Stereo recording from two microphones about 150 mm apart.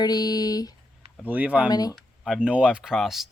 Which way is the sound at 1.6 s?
25° left (ahead or behind).